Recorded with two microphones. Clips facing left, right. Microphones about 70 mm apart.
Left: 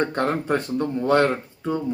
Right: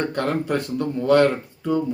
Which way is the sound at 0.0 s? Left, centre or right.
Left.